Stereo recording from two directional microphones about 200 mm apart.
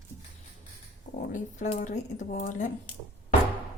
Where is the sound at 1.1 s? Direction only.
40° left (ahead or behind).